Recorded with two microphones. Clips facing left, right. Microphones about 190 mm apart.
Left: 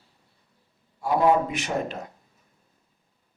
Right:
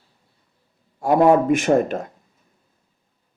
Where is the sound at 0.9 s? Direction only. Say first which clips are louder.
Right 6 dB; 50° right (ahead or behind).